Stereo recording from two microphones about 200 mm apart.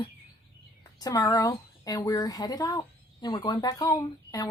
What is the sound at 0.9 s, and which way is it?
Speech, 20° left (ahead or behind).